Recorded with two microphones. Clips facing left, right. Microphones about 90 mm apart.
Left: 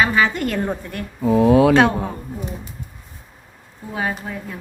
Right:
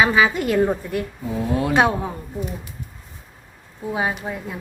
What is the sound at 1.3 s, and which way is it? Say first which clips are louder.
Speech: left 10 dB; 90° left.